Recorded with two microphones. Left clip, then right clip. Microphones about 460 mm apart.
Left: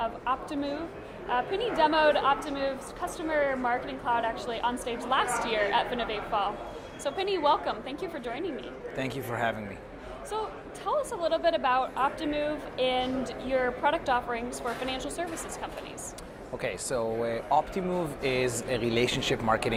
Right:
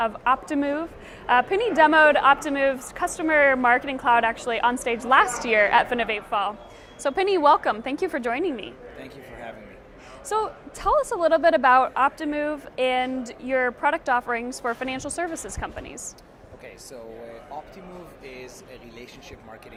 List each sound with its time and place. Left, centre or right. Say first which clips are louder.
0.0 s a woman's voice: right 8 dB; right
1.3 s a woman's voice: right 8 dB; right
1.8 s a woman's voice: right 7 dB; right
9.0 s speech: left 8 dB; left
10.2 s a woman's voice: right 9 dB; right
16.6 s speech: left 10 dB; left